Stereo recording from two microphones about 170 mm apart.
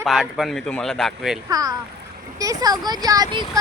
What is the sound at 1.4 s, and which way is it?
Speech, 20° right (ahead or behind).